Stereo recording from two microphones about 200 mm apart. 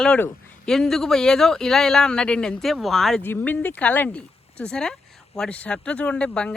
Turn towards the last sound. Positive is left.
turn(degrees=5)  # may be behind; listen again after turning